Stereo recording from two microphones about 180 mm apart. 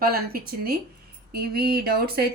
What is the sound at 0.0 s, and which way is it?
A woman's voice, 55° right (ahead or behind).